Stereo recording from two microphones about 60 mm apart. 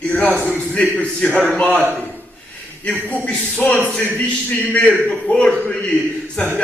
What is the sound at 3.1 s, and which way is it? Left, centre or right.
A man's voice, left.